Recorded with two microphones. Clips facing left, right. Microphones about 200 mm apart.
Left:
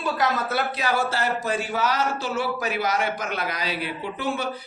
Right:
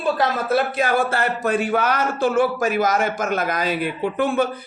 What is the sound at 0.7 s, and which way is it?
Speech, 55° right (ahead or behind).